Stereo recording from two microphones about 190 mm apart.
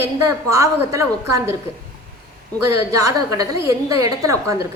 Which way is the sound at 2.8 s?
15° right (ahead or behind).